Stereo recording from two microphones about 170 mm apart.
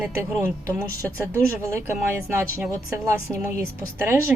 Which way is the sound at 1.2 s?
15° right (ahead or behind).